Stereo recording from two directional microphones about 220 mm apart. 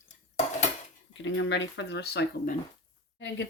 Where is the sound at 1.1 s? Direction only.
55° left (ahead or behind).